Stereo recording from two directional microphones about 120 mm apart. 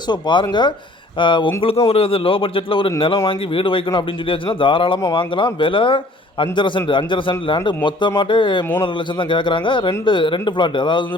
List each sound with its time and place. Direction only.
0.1 s speech: 40° left (ahead or behind)